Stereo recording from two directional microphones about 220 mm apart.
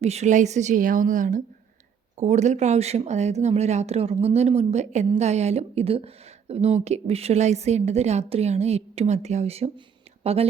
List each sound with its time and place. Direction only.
0.0 s speech: 30° right (ahead or behind)